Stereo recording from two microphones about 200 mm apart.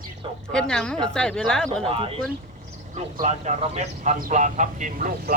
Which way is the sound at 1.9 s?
30° right (ahead or behind).